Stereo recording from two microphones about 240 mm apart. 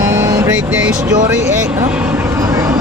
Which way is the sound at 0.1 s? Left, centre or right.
Centre.